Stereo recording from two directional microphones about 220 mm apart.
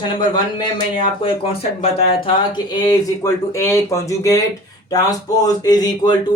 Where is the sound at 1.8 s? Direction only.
25° left (ahead or behind).